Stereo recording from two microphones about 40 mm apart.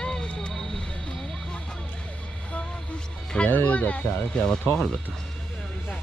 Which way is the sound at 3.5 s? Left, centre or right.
Left.